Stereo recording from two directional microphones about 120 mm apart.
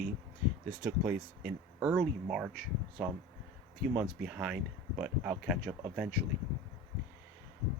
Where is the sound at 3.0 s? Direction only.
Centre (ahead or behind).